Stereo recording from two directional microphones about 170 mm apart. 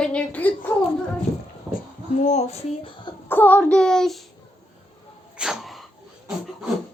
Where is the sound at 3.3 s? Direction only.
10° left (ahead or behind).